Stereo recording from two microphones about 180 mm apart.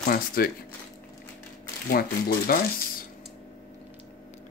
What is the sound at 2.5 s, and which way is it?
Speech, 55° left (ahead or behind).